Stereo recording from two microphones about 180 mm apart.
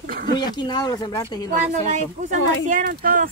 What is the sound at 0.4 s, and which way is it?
Speech, 25° left (ahead or behind).